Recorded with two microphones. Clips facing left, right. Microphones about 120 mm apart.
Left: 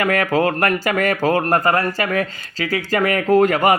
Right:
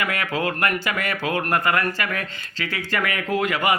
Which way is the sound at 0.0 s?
40° left (ahead or behind).